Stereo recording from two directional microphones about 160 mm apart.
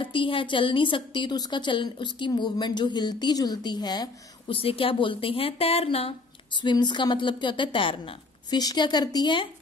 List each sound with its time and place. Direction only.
0.0 s a woman's voice: 30° left (ahead or behind)